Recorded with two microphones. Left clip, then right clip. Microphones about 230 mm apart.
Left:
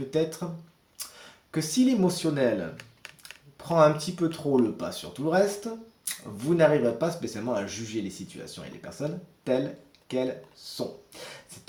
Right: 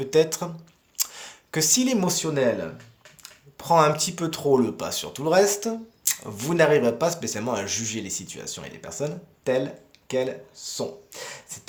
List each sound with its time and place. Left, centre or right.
0.1 s speech: right